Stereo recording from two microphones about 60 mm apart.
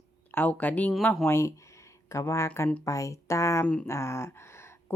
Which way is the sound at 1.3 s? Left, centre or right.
Left.